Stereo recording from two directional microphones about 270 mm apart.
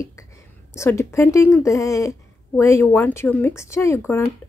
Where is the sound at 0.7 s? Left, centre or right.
Centre.